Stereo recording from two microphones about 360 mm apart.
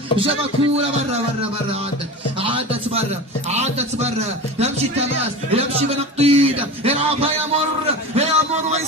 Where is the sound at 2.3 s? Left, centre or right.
Centre.